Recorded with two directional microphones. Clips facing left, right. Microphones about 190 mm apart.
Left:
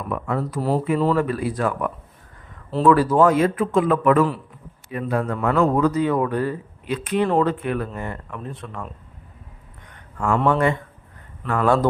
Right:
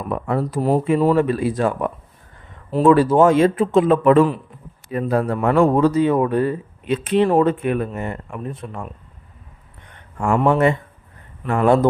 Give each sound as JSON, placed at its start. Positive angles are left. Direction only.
{"t": 0.0, "sound": "a man's voice", "side_deg": -30}
{"t": 0.6, "sound": "a man's voice", "side_deg": -15}
{"t": 10.3, "sound": "speech", "side_deg": -10}
{"t": 11.4, "sound": "a man's voice", "side_deg": -25}